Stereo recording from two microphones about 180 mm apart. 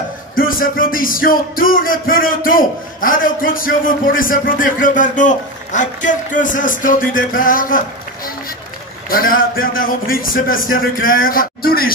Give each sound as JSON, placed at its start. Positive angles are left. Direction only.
{"t": 0.4, "sound": "speech", "side_deg": 50}
{"t": 9.1, "sound": "speech", "side_deg": 55}